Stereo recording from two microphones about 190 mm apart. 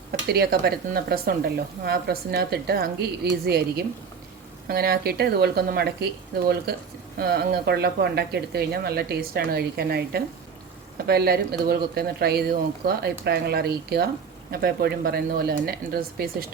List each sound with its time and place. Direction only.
0.1 s speech: 55° right (ahead or behind)
7.2 s speech: 55° right (ahead or behind)